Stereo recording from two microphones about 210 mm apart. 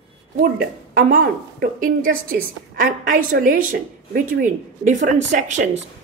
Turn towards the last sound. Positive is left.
turn(degrees=-35)  # may be behind; listen again after turning